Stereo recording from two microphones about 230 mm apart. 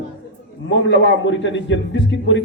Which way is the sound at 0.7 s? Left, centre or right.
Left.